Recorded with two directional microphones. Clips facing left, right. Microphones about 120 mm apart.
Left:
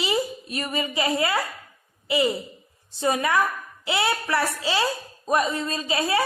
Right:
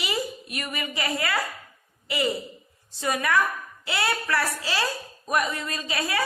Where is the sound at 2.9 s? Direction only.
25° left (ahead or behind).